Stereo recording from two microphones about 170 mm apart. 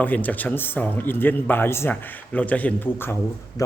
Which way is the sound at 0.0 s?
10° left (ahead or behind).